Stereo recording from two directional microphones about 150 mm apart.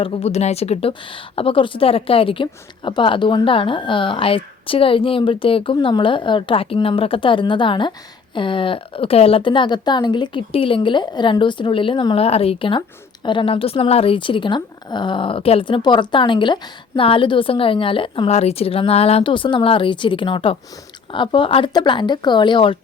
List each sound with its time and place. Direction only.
0.0 s speech: 45° left (ahead or behind)